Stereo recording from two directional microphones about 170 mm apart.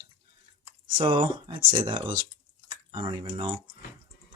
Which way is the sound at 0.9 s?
30° right (ahead or behind).